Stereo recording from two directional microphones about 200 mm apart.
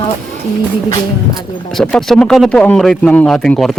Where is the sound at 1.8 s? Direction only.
Centre (ahead or behind).